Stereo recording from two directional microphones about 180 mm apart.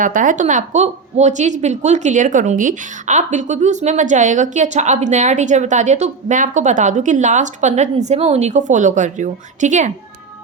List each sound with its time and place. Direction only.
0.0 s a woman's voice: 45° right (ahead or behind)